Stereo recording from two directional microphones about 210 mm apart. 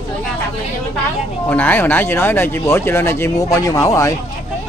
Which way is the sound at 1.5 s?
10° left (ahead or behind).